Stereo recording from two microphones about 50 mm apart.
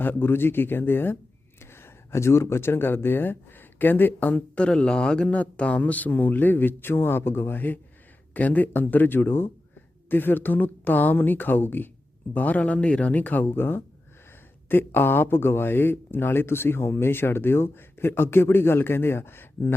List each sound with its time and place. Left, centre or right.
0.0 s speech: left
1.7 s speech: left
4.5 s a man's voice: left
13.6 s speech: left